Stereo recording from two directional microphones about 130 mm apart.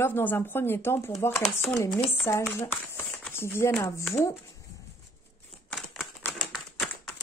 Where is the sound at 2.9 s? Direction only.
15° left (ahead or behind).